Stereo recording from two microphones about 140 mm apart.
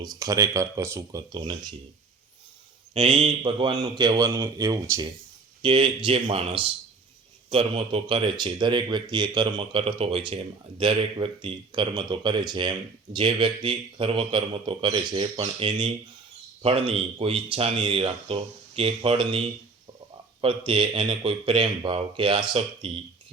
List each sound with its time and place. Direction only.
0.0 s a man's voice: 25° right (ahead or behind)
2.9 s a man's voice: 40° right (ahead or behind); by 5.0 s 25° right (ahead or behind)
5.6 s speech: 35° right (ahead or behind)